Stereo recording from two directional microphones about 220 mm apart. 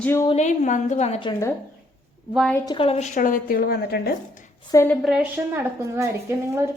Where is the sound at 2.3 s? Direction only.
Centre (ahead or behind).